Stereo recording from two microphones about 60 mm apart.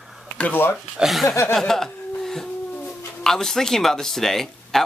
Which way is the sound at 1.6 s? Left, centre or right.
Centre.